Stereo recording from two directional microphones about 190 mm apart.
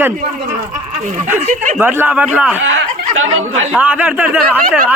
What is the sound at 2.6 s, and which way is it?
Speech, 90° right.